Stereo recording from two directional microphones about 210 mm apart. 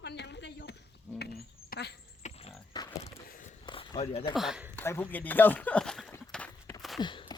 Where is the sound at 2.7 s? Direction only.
20° left (ahead or behind).